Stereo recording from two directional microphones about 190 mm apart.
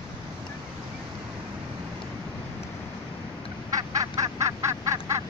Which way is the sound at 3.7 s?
20° right (ahead or behind).